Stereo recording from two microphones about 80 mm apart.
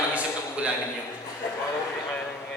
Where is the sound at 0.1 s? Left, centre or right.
Centre.